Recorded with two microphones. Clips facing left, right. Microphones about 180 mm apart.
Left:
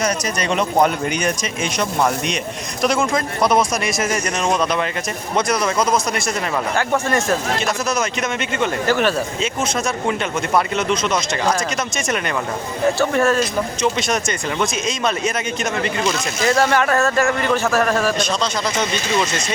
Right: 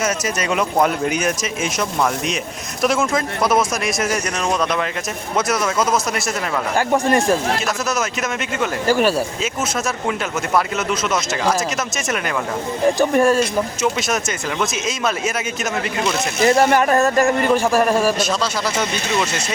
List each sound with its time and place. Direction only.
0.0 s speech: 5° right (ahead or behind)
6.7 s speech: 15° right (ahead or behind)
7.9 s speech: centre (ahead or behind)
13.0 s speech: 15° right (ahead or behind)
16.4 s speech: 20° right (ahead or behind)